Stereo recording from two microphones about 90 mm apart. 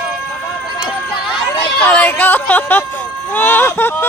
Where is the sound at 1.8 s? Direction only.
15° left (ahead or behind).